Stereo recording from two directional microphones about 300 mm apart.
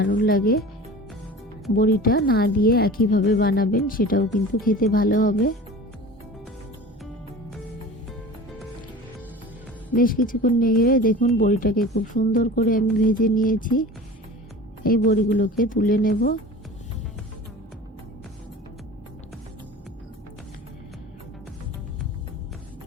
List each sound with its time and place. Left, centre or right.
0.0 s a woman's voice: left
1.7 s a woman's voice: left
9.9 s a woman's voice: left
14.8 s a woman's voice: left